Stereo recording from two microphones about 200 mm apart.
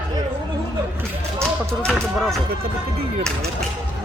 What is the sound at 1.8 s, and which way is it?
Speech, centre (ahead or behind).